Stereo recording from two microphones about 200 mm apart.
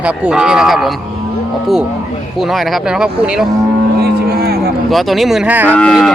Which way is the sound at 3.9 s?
50° right (ahead or behind).